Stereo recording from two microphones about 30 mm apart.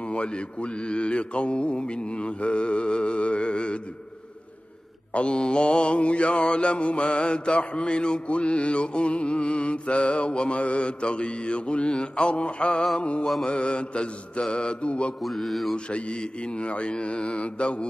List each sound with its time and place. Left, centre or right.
0.0 s mantra: left
5.1 s mantra: left
15.2 s mantra: centre
15.7 s mantra: left